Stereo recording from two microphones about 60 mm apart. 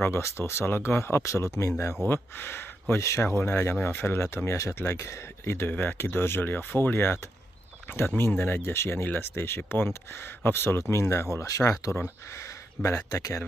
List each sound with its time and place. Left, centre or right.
0.0 s speech: left
2.0 s speech: left
3.8 s speech: left
4.5 s speech: left
5.4 s speech: left
12.4 s a sound: left
13.1 s speech: left